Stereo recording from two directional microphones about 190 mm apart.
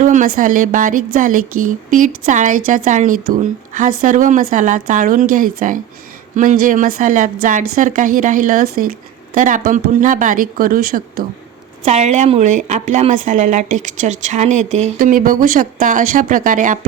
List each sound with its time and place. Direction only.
0.0 s a woman's voice: 45° right (ahead or behind)
11.9 s speech: 35° right (ahead or behind)